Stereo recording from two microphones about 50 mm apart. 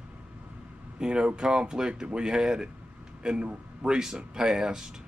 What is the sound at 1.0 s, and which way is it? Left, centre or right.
A man's voice, centre.